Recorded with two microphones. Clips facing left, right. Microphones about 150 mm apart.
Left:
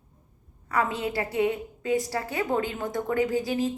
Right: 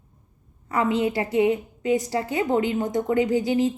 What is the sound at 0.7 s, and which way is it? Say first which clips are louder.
A woman's voice: right 5 dB; 20° right (ahead or behind).